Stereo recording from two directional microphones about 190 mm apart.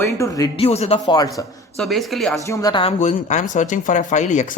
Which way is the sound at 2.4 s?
15° left (ahead or behind).